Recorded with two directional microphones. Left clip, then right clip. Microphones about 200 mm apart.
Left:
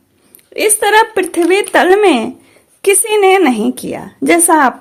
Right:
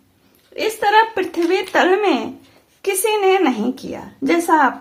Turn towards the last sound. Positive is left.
turn(degrees=35)  # may be behind; listen again after turning